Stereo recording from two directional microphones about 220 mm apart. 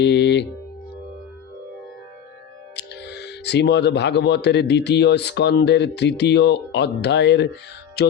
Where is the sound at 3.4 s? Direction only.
50° left (ahead or behind).